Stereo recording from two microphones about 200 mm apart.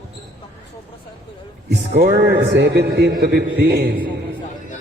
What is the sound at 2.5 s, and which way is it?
A man's voice, 60° right (ahead or behind).